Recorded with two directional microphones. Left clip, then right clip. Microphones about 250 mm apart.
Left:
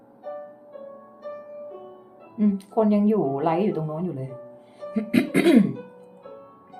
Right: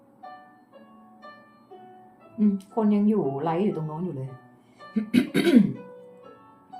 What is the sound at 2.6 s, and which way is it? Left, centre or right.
Speech, centre.